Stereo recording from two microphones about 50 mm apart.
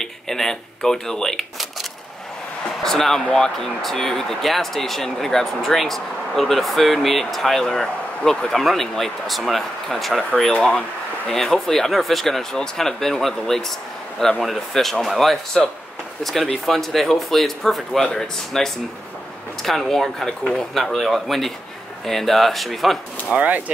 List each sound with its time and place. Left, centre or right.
0.0 s speech: centre
10.3 s speech: centre
16.6 s speech: centre
23.3 s speech: right